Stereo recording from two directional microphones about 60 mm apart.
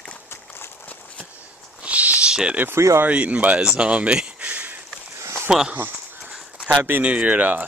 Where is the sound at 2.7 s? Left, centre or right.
Right.